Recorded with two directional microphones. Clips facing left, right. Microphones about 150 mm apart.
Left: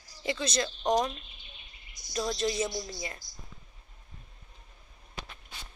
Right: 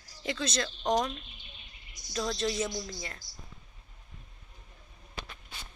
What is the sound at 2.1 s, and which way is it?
Speech, 10° left (ahead or behind).